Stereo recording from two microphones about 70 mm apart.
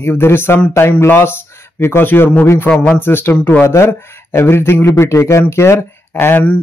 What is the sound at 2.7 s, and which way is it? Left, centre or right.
Speech, centre.